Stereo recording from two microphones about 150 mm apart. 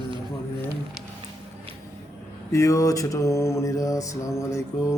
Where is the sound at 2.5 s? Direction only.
20° left (ahead or behind).